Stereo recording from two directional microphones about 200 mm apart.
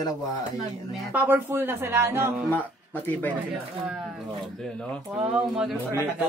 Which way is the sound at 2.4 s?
10° left (ahead or behind).